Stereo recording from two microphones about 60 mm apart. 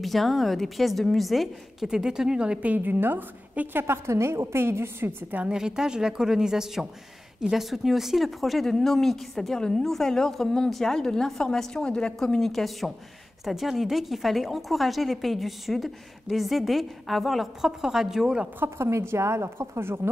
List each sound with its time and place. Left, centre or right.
0.0 s a woman's voice: centre; by 5.1 s right
5.5 s a woman's voice: centre
18.6 s a woman's voice: right